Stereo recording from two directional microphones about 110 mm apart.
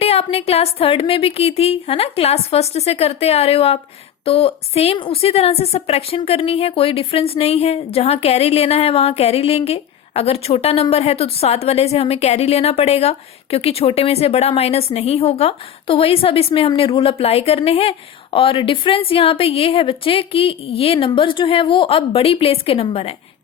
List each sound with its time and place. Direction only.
0.0 s a woman's voice: 65° left (ahead or behind)